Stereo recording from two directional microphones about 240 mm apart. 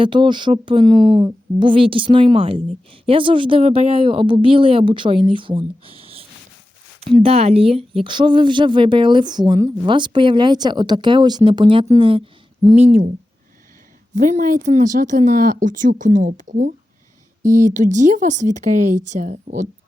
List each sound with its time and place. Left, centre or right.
0.0 s speech: right
14.2 s speech: right